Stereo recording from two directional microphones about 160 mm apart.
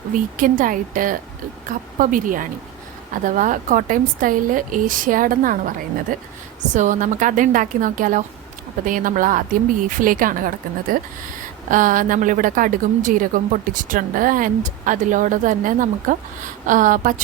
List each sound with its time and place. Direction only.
0.1 s a woman's voice: 55° right (ahead or behind)